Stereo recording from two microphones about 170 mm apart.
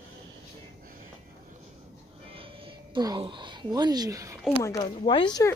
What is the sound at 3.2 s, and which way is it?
Speech, 30° right (ahead or behind).